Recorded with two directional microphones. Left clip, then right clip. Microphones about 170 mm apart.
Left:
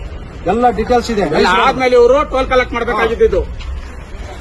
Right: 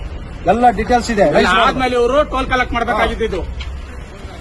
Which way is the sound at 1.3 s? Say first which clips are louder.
Left 2 dB; centre (ahead or behind).